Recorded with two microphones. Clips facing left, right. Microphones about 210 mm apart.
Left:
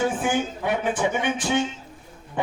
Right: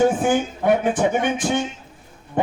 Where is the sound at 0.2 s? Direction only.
45° right (ahead or behind).